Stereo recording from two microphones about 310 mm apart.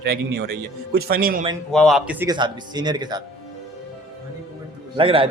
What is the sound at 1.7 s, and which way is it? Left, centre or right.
Speech, centre.